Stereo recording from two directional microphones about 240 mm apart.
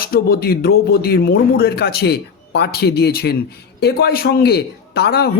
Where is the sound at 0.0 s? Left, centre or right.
Left.